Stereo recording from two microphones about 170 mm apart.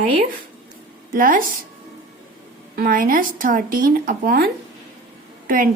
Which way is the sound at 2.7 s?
60° right (ahead or behind).